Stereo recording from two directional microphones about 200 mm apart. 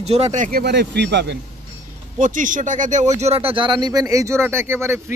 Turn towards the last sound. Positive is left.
turn(degrees=-10)  # may be behind; listen again after turning